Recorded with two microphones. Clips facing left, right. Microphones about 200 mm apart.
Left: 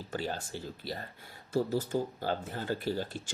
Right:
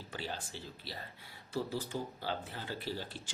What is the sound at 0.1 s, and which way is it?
Speech, 45° left (ahead or behind).